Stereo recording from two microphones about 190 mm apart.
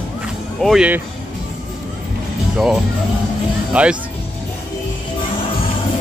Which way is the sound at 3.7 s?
5° right (ahead or behind).